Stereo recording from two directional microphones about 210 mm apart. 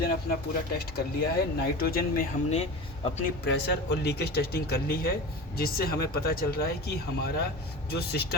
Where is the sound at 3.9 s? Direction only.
50° left (ahead or behind).